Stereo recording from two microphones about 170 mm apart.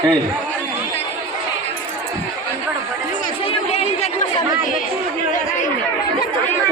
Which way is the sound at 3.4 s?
35° left (ahead or behind).